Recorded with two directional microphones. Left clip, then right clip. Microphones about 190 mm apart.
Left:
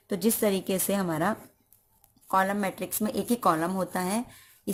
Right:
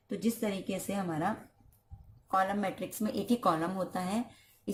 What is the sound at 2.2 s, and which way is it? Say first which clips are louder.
Speech: left 4 dB; 35° left (ahead or behind).